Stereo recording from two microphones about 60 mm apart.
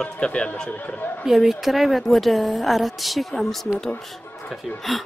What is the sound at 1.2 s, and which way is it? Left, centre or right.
A woman's voice, centre.